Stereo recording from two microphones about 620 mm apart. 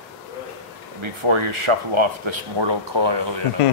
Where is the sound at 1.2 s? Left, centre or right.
Right.